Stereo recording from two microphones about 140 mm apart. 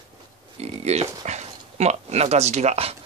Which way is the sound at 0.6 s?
50° right (ahead or behind).